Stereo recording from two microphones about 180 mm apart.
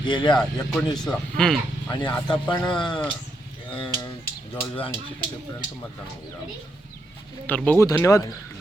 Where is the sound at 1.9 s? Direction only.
25° left (ahead or behind).